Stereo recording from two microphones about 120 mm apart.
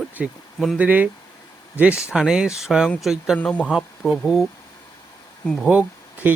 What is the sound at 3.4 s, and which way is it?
Speech, 10° left (ahead or behind).